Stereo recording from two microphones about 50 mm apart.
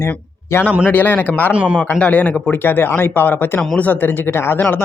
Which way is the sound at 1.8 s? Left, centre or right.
Left.